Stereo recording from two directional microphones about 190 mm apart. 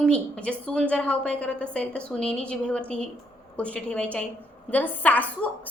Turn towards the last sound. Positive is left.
turn(degrees=10)  # may be behind; listen again after turning